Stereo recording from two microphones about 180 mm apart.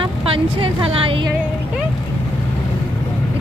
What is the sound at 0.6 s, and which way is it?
Speech, 30° right (ahead or behind).